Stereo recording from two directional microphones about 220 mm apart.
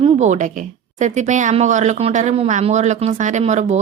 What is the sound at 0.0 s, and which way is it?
A woman's voice, 35° right (ahead or behind).